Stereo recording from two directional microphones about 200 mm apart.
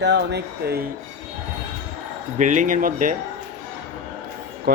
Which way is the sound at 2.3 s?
40° right (ahead or behind).